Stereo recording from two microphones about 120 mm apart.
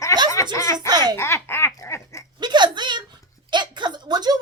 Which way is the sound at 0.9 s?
35° right (ahead or behind).